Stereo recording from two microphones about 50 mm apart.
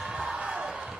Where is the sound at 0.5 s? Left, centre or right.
Centre.